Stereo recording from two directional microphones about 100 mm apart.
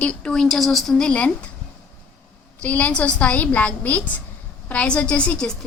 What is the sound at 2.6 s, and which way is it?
A woman's voice, 15° left (ahead or behind).